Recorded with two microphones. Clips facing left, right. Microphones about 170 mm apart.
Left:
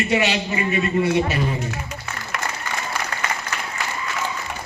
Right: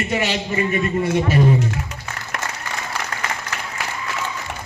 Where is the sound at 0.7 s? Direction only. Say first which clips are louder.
Left 3 dB; 45° right (ahead or behind).